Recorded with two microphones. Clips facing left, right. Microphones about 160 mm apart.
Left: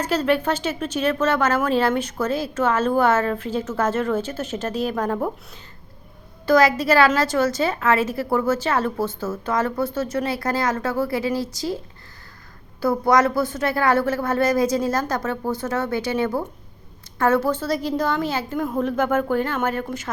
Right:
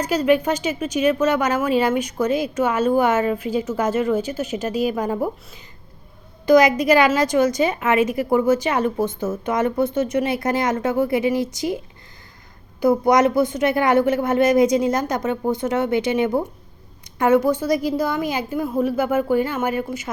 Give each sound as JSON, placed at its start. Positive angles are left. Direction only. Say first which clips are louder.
{"t": 0.0, "sound": "a woman's voice", "louder": "right 3 dB", "side_deg": -10}
{"t": 6.4, "sound": "a woman's voice", "louder": "right 3 dB", "side_deg": -15}
{"t": 12.8, "sound": "a woman's voice", "louder": "right 3 dB", "side_deg": -20}